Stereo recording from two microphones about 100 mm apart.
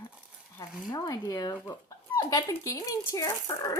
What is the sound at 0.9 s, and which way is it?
Speech, 35° left (ahead or behind).